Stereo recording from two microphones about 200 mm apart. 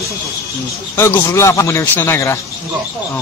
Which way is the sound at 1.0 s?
15° left (ahead or behind).